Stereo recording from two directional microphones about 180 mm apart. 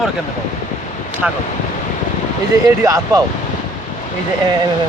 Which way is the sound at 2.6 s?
20° right (ahead or behind).